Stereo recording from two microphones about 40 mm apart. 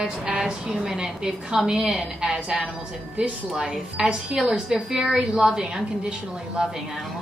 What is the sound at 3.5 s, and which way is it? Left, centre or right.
A woman's voice, centre.